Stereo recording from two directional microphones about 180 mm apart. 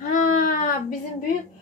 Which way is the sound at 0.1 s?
50° left (ahead or behind).